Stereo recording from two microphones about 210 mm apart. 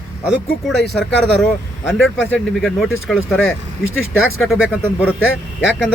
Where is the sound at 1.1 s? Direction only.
55° left (ahead or behind).